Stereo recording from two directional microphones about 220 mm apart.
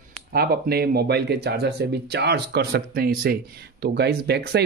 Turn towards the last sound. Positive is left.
turn(degrees=-50)  # may be behind; listen again after turning